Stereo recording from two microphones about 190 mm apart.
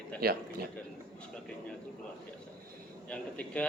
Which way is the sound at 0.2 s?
55° right (ahead or behind).